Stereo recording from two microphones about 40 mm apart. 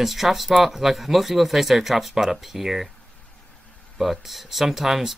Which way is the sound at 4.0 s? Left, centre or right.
Centre.